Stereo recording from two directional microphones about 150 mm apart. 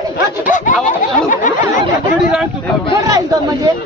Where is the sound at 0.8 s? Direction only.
60° left (ahead or behind).